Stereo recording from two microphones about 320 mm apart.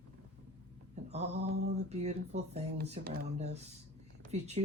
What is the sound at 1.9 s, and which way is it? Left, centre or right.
Speech, right.